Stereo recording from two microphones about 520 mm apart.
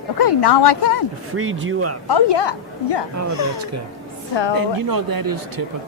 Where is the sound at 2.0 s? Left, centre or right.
Left.